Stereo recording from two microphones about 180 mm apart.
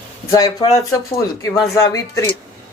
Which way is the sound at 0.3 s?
20° left (ahead or behind).